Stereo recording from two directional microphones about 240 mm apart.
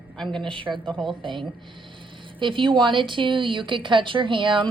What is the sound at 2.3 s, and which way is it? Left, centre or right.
Speech, centre.